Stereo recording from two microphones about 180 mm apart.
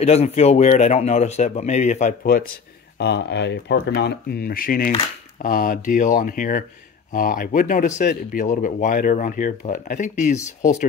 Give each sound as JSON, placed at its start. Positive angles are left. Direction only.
{"t": 0.0, "sound": "a man's voice", "side_deg": 35}
{"t": 3.0, "sound": "speech", "side_deg": 70}